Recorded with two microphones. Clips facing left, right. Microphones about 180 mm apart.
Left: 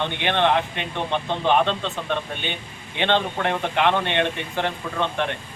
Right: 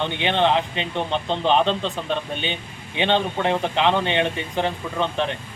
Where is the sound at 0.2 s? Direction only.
15° right (ahead or behind).